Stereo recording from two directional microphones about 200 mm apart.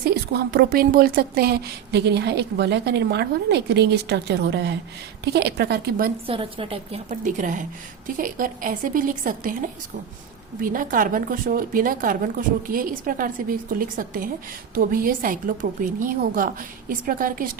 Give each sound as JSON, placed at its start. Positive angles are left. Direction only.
{"t": 0.0, "sound": "a woman's voice", "side_deg": -55}
{"t": 6.2, "sound": "a woman's voice", "side_deg": -25}